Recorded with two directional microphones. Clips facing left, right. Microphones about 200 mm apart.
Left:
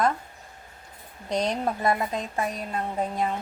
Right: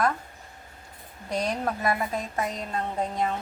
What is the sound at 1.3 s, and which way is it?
Speech, 20° left (ahead or behind).